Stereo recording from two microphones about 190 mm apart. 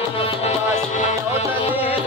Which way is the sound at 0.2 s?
35° left (ahead or behind).